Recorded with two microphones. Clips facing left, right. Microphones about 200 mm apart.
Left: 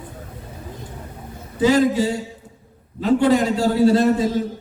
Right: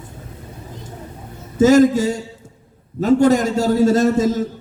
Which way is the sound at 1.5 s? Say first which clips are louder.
Right 5 dB; 45° right (ahead or behind).